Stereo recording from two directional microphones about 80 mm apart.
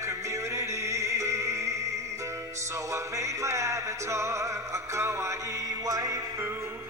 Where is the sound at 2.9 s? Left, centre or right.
Right.